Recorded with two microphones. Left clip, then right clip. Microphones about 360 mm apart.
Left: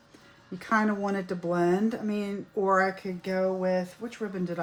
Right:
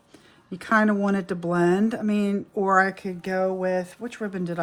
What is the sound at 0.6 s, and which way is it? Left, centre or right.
Speech, right.